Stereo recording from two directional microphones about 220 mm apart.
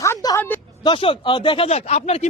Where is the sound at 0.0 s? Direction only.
15° left (ahead or behind).